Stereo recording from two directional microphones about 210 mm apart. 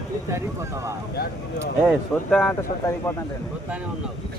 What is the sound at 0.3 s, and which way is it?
Speech, 15° right (ahead or behind).